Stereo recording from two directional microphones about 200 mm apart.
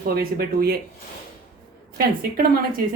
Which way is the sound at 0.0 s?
50° right (ahead or behind).